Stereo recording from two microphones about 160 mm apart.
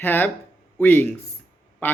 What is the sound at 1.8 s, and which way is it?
Quack, 10° left (ahead or behind).